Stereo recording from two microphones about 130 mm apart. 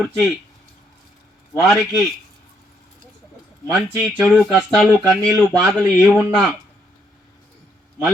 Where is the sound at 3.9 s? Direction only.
20° right (ahead or behind).